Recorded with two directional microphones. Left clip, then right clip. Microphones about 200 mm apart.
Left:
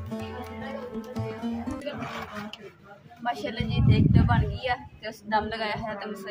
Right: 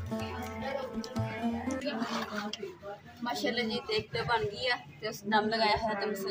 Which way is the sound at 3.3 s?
Centre (ahead or behind).